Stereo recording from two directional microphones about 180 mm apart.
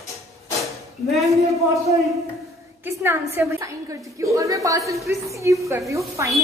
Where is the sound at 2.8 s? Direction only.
10° right (ahead or behind).